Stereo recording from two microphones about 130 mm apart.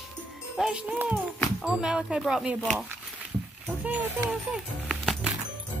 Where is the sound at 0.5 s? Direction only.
5° right (ahead or behind).